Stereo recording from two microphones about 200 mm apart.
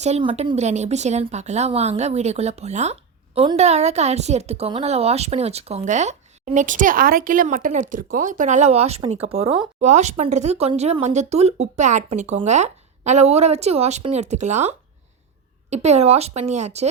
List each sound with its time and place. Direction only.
0.0 s speech: 30° right (ahead or behind)